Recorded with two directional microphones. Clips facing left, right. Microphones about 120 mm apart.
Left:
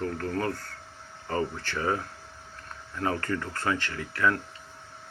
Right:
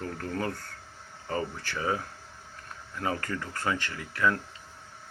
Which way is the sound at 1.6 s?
10° right (ahead or behind).